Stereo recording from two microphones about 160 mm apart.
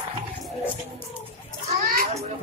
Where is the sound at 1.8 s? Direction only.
65° right (ahead or behind).